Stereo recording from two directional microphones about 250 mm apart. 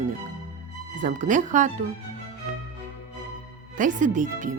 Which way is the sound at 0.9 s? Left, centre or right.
Right.